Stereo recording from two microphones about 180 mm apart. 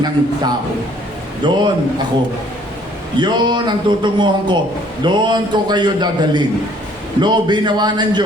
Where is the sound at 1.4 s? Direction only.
25° right (ahead or behind).